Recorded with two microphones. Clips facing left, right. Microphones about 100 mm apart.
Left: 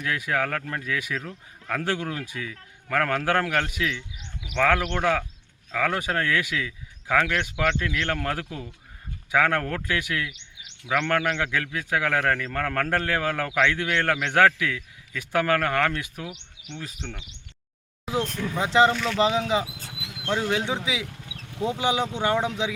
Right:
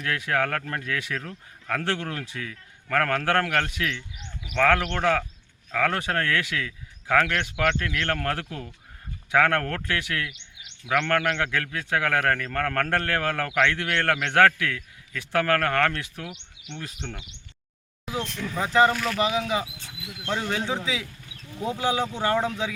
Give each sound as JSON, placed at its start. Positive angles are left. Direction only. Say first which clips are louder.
{"t": 0.0, "sound": "a man's voice", "louder": "right 1 dB", "side_deg": 5}
{"t": 18.3, "sound": "a man's voice", "louder": "even", "side_deg": 15}
{"t": 18.9, "sound": "speech", "louder": "left 1 dB", "side_deg": -5}
{"t": 19.2, "sound": "a man's voice", "louder": "left 4 dB", "side_deg": 25}
{"t": 21.1, "sound": "a sound", "louder": "left 2 dB", "side_deg": 70}
{"t": 21.6, "sound": "speech", "louder": "left 1 dB", "side_deg": 20}